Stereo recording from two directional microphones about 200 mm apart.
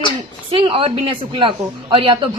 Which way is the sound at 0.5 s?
25° right (ahead or behind).